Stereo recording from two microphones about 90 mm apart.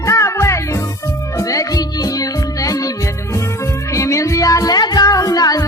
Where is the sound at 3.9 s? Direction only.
35° left (ahead or behind).